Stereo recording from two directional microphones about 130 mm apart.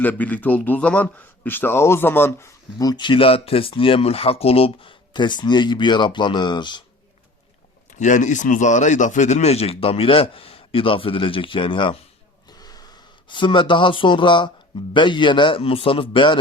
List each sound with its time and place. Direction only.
0.0 s a man's voice: 10° left (ahead or behind)
2.7 s speech: 30° left (ahead or behind)
7.9 s a man's voice: 70° left (ahead or behind); by 11.9 s 40° left (ahead or behind)
12.5 s a sound: 30° left (ahead or behind)
14.9 s speech: 40° left (ahead or behind)